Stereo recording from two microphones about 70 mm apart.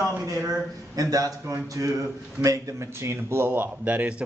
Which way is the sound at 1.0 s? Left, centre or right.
Right.